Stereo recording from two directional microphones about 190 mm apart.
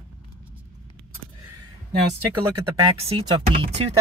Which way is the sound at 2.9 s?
30° right (ahead or behind).